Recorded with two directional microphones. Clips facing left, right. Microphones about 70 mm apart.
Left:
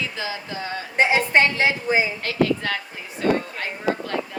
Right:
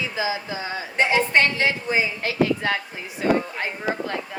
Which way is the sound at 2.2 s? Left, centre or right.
Centre.